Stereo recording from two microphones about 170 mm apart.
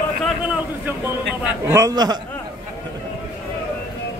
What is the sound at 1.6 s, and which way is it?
Speech, 15° right (ahead or behind).